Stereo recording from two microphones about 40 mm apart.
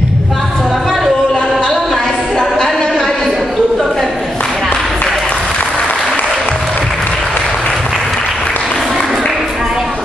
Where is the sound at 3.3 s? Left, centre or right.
Centre.